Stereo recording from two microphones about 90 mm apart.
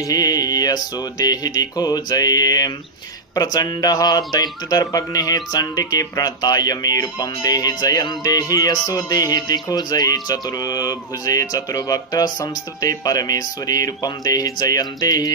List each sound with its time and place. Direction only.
0.0 s speech: 45° left (ahead or behind)